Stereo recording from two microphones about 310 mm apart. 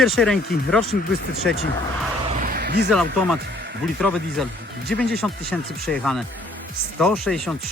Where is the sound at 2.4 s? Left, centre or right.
Right.